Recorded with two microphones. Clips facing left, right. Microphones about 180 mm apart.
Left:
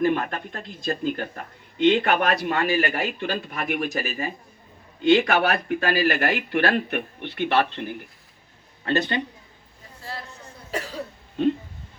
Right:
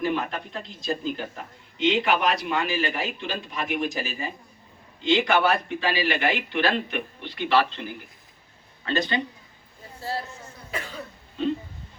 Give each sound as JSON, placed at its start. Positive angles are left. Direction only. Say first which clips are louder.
{"t": 0.0, "sound": "a man's voice", "louder": "left 4 dB", "side_deg": 50}
{"t": 10.7, "sound": "cough", "louder": "left 4 dB", "side_deg": 35}